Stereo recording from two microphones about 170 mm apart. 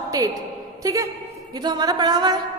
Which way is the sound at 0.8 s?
20° right (ahead or behind).